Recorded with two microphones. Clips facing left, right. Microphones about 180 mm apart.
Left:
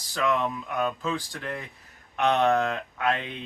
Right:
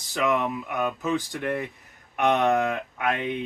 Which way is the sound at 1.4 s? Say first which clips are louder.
Right 7 dB; 60° right (ahead or behind).